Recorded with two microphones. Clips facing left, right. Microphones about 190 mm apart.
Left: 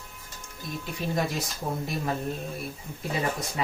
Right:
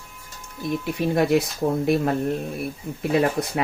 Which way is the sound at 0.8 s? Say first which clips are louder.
Right 7 dB; 65° right (ahead or behind).